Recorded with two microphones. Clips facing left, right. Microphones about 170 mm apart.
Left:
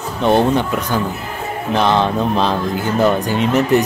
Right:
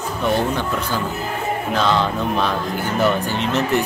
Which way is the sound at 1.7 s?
20° left (ahead or behind).